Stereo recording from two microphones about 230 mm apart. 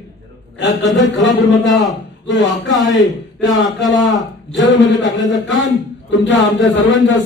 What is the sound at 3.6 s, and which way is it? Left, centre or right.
Speech, centre.